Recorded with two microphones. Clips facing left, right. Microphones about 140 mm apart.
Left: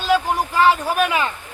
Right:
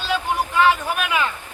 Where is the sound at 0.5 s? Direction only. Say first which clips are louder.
Left 2 dB; 35° left (ahead or behind).